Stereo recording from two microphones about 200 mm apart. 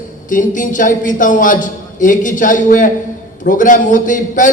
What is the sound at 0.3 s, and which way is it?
A man's voice, 40° left (ahead or behind).